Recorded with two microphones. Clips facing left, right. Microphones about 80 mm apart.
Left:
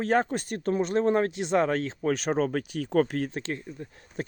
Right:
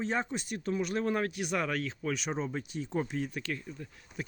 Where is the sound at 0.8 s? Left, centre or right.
Left.